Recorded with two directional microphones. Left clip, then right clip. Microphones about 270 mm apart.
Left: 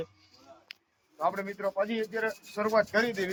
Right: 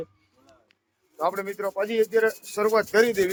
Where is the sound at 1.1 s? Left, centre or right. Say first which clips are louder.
Right 4 dB; centre.